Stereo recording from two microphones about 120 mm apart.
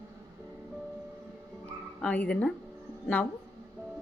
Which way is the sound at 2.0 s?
10° left (ahead or behind).